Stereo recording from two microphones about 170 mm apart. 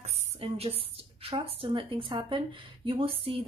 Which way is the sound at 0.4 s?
35° right (ahead or behind).